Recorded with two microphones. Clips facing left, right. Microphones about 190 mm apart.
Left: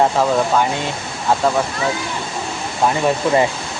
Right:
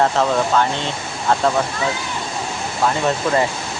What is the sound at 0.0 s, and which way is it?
Speech, 10° left (ahead or behind).